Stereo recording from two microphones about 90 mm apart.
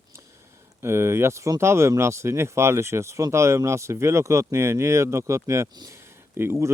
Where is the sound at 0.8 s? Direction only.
30° right (ahead or behind).